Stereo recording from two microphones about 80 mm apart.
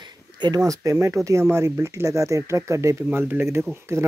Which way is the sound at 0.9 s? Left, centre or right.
Right.